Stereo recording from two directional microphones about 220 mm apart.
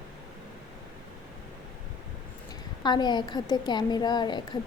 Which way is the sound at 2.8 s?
20° left (ahead or behind).